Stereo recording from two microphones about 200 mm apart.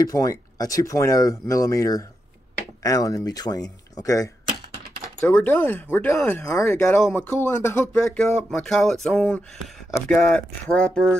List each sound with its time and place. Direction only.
0.0 s speech: 15° left (ahead or behind)